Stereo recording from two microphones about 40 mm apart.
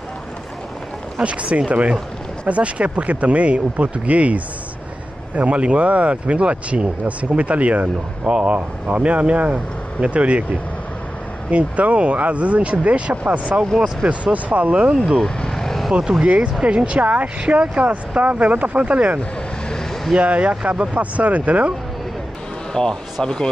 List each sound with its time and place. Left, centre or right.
1.2 s speech: right
8.5 s speech: right
11.5 s speech: right
15.1 s vehicle: centre
15.9 s speech: centre
16.6 s speech: right
20.2 s speech: right
22.8 s speech: centre